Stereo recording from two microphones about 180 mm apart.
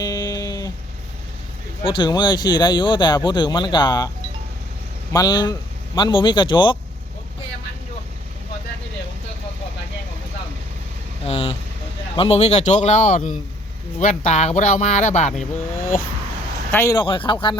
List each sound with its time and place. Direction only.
0.0 s a sound: 20° left (ahead or behind)
1.8 s speech: 25° left (ahead or behind)
5.1 s speech: 20° left (ahead or behind)
11.3 s speech: 35° left (ahead or behind)
16.7 s speech: 15° left (ahead or behind)